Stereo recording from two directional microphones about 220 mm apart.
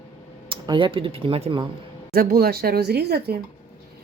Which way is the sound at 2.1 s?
45° right (ahead or behind).